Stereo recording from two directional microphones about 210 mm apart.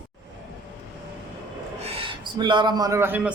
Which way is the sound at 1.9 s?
25° right (ahead or behind).